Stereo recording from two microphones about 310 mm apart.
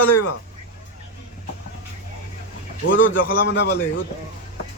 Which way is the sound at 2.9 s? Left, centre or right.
Left.